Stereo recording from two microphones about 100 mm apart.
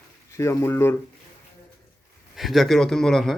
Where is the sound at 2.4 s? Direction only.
Centre (ahead or behind).